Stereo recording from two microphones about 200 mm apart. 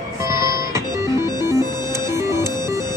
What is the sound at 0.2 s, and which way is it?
Music, 15° right (ahead or behind).